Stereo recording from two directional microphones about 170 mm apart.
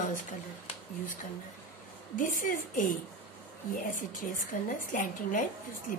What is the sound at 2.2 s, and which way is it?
A woman's voice, 50° left (ahead or behind).